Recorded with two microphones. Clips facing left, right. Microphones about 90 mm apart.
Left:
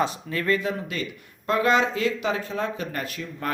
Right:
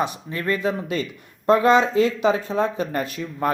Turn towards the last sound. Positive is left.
turn(degrees=-25)  # may be behind; listen again after turning